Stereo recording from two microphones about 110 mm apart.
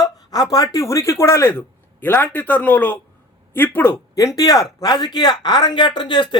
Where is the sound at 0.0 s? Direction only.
35° left (ahead or behind).